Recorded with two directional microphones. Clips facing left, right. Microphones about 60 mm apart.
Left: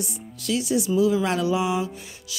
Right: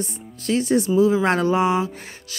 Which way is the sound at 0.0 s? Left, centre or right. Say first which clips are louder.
Right 3 dB; right.